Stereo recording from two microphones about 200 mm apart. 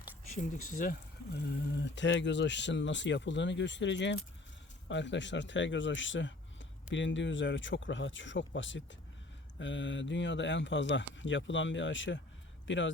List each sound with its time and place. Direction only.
0.8 s speech: 50° left (ahead or behind); by 12.9 s 70° left (ahead or behind)